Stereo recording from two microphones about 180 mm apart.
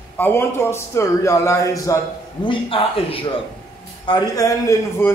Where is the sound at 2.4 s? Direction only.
30° left (ahead or behind).